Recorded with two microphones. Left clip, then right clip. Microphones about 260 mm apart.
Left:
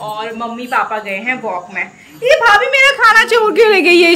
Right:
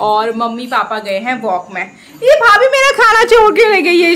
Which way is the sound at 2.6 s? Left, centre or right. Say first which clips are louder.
Even; right.